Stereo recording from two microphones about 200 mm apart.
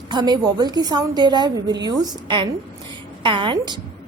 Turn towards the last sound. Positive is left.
turn(degrees=-25)  # may be behind; listen again after turning